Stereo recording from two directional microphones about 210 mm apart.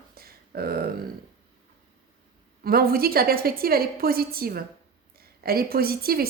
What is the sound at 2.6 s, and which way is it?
A woman's voice, 45° right (ahead or behind).